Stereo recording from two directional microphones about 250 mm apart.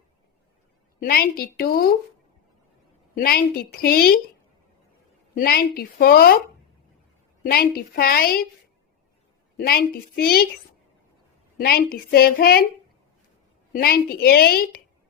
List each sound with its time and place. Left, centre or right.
0.9 s a woman's voice: left
3.2 s a woman's voice: left
5.3 s a woman's voice: left
7.4 s a woman's voice: left
9.6 s a woman's voice: left
11.5 s a woman's voice: left
13.7 s a woman's voice: left